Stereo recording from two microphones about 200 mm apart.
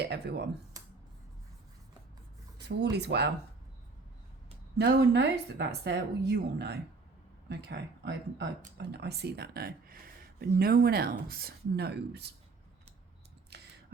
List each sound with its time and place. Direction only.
0.0 s speech: 55° right (ahead or behind)
2.9 s speech: 55° right (ahead or behind)
4.8 s speech: 55° right (ahead or behind)
13.5 s a sound: 55° right (ahead or behind)